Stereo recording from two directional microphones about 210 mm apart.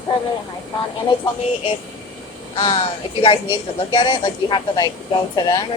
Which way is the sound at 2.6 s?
25° left (ahead or behind).